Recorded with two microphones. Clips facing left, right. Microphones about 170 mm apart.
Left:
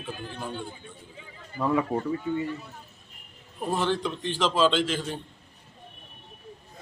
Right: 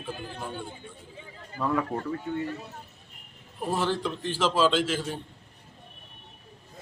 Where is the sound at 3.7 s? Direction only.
5° right (ahead or behind).